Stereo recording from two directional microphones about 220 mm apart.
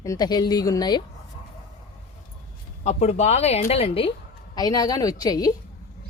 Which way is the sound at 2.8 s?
30° left (ahead or behind).